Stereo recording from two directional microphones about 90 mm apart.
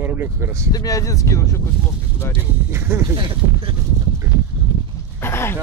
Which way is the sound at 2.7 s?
25° right (ahead or behind).